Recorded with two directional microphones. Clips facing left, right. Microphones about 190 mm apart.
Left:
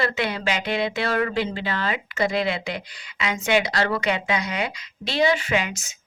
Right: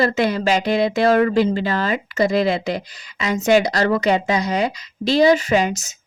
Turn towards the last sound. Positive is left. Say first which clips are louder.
# right 7 dB
turn(degrees=-40)  # may be behind; listen again after turning